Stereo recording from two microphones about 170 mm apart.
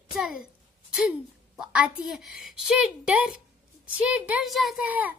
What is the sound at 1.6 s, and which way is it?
A woman's voice, 5° right (ahead or behind).